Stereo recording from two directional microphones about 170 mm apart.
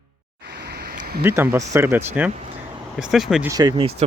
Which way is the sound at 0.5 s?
75° right (ahead or behind).